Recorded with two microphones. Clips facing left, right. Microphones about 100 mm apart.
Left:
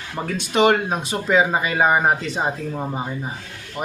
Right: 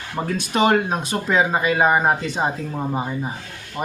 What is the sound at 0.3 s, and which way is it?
Speech, centre (ahead or behind).